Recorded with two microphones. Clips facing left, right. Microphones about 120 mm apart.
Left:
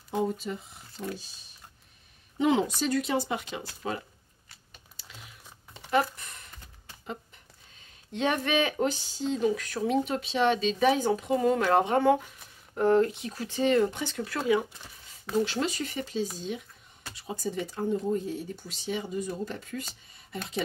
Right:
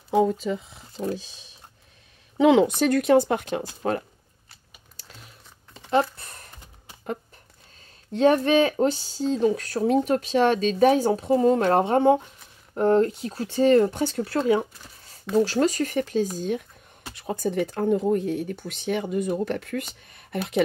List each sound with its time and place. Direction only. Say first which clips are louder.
0.1 s speech: right 8 dB; 90° right
2.3 s speech: right 8 dB; 90° right; by 4.0 s 55° right (ahead or behind)
5.9 s computer keyboard: right 4 dB; 30° right (ahead or behind)
8.1 s speech: right 9 dB; 40° right (ahead or behind)
15.4 s speech: right 8 dB; 40° right (ahead or behind); by 20.6 s 65° right (ahead or behind)